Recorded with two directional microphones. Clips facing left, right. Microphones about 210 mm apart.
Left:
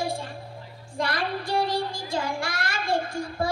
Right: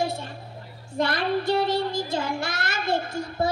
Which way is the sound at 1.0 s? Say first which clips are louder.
Right 4 dB; 25° right (ahead or behind).